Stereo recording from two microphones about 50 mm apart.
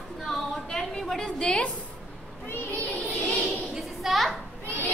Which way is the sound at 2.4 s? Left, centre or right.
Left.